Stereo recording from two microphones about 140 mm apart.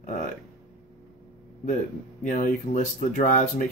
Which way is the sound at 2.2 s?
70° left (ahead or behind).